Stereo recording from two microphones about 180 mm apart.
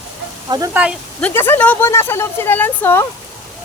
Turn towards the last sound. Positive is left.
turn(degrees=10)  # may be behind; listen again after turning